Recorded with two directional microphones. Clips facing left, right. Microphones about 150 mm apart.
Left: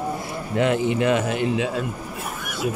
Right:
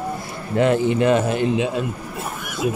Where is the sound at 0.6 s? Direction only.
35° right (ahead or behind).